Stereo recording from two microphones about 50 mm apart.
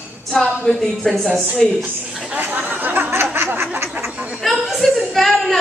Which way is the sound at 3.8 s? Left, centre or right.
Right.